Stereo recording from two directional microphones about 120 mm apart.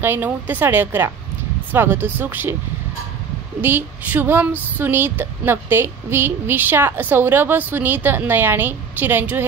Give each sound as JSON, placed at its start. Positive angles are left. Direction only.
{"t": 0.0, "sound": "female singing", "side_deg": -15}
{"t": 3.6, "sound": "female singing", "side_deg": -15}